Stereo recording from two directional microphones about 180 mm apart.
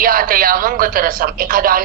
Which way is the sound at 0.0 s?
55° right (ahead or behind).